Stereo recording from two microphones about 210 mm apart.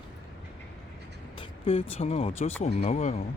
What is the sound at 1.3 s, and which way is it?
Speech, 25° left (ahead or behind).